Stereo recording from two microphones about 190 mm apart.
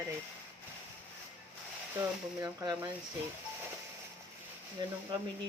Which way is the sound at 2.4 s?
15° right (ahead or behind).